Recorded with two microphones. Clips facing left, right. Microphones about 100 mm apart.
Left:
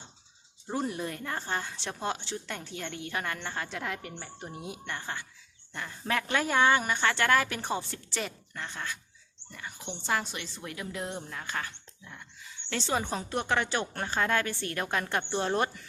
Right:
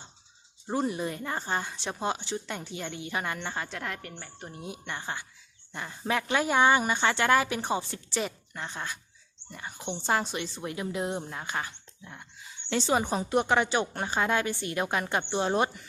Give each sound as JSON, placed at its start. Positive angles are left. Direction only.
{"t": 0.7, "sound": "a woman's voice", "side_deg": -10}
{"t": 3.7, "sound": "speech", "side_deg": 5}
{"t": 4.9, "sound": "a woman's voice", "side_deg": -10}